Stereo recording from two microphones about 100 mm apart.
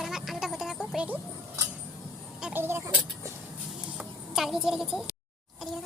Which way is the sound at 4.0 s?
5° right (ahead or behind).